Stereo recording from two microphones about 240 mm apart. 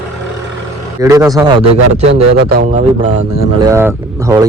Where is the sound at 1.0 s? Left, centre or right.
Centre.